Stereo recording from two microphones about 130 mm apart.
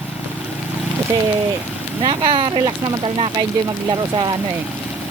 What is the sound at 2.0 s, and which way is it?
Speech, 35° right (ahead or behind).